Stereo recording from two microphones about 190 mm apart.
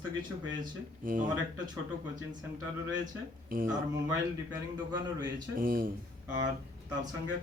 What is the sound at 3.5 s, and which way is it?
Speech, 45° right (ahead or behind).